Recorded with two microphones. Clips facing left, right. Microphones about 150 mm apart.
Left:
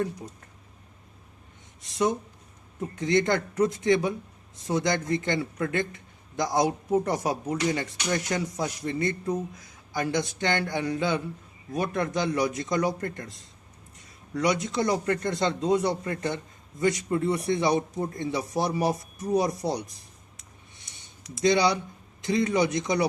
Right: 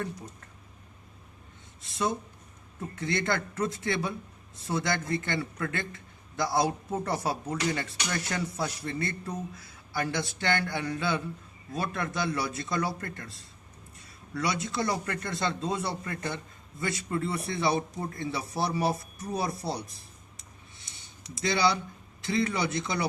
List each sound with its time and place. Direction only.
2.9 s speech: 20° left (ahead or behind)
21.4 s speech: 20° left (ahead or behind)